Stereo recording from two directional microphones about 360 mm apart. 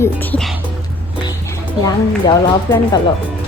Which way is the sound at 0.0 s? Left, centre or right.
Centre.